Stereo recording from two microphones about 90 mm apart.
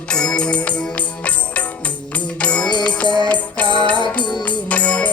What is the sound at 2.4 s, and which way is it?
Music, 15° left (ahead or behind).